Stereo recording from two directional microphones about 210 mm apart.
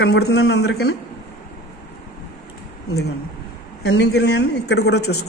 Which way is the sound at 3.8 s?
55° left (ahead or behind).